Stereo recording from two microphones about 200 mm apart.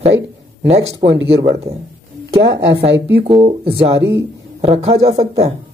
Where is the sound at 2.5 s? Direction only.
60° right (ahead or behind).